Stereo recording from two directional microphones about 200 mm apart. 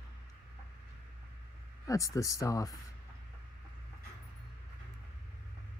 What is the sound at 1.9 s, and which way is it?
Speech, 15° left (ahead or behind).